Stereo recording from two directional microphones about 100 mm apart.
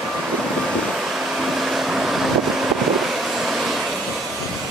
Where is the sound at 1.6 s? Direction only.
5° right (ahead or behind).